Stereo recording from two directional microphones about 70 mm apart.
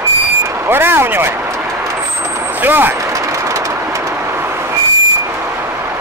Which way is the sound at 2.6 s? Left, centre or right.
Right.